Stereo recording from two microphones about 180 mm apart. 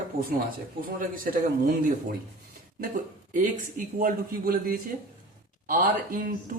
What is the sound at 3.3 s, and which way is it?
A man's voice, 45° right (ahead or behind).